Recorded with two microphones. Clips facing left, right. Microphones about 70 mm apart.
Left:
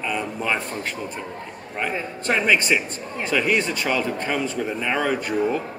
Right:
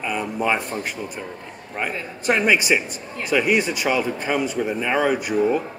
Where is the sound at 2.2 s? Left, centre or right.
Centre.